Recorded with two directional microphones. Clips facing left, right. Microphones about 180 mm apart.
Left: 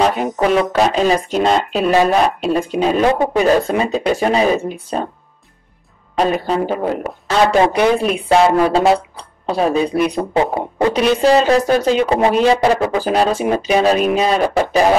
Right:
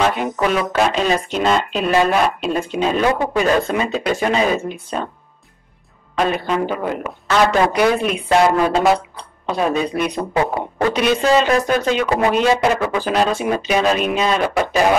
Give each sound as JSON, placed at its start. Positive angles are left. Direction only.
{"t": 0.0, "sound": "speech", "side_deg": 35}
{"t": 6.1, "sound": "speech", "side_deg": 35}